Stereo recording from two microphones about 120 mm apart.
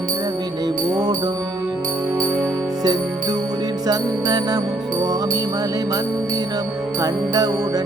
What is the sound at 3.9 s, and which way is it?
Music, 35° right (ahead or behind).